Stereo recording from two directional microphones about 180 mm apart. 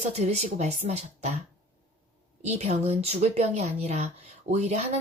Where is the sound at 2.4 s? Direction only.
40° right (ahead or behind).